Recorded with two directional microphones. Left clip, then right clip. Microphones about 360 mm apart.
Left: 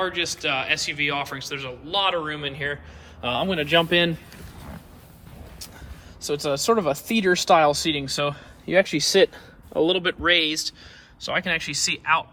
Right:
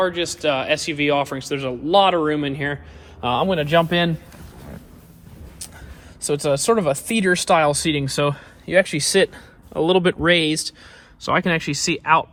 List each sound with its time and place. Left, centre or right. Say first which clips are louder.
0.0 s speech: right 5 dB; centre
6.2 s speech: right 4 dB; centre